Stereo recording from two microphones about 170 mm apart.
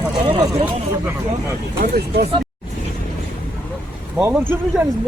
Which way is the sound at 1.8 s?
70° right (ahead or behind).